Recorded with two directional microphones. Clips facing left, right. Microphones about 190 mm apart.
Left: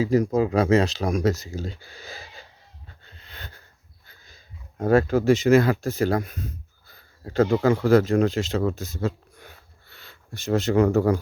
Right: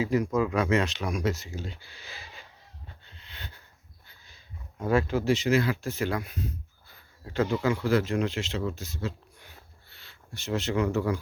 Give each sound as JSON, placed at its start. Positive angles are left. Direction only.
{"t": 0.0, "sound": "speech", "side_deg": 40}
{"t": 3.0, "sound": "wheeze", "side_deg": 45}
{"t": 4.0, "sound": "sniff", "side_deg": 45}
{"t": 4.8, "sound": "speech", "side_deg": 40}